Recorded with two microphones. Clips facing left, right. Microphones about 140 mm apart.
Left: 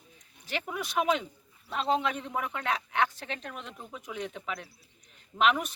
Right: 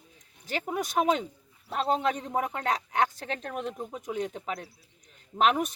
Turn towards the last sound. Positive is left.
turn(degrees=-40)  # may be behind; listen again after turning